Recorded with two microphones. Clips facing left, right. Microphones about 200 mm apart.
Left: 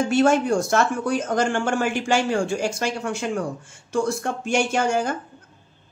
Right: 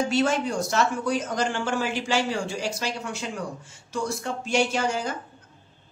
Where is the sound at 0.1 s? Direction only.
50° left (ahead or behind).